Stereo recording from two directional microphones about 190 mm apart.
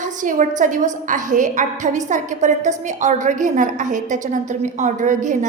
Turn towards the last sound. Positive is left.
turn(degrees=-40)  # may be behind; listen again after turning